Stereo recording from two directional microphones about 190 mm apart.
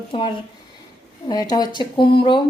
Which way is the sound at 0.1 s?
25° left (ahead or behind).